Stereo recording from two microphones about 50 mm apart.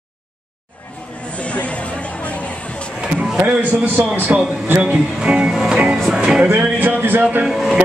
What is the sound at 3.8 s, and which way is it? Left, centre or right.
Speech, right.